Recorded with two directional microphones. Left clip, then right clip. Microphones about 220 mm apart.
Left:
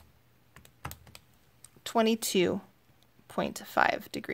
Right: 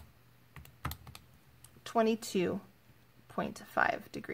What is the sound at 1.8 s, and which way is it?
Speech, 30° left (ahead or behind).